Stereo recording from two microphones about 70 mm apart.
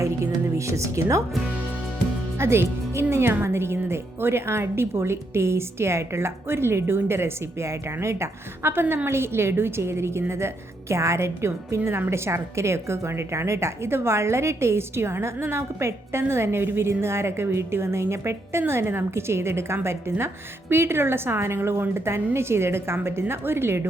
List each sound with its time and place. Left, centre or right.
0.0 s music: right
2.4 s a woman's voice: right